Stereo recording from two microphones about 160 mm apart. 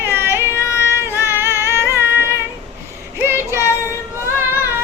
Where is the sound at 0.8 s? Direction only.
15° left (ahead or behind).